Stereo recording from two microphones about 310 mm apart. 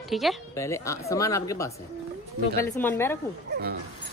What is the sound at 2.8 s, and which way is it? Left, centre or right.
Speech, centre.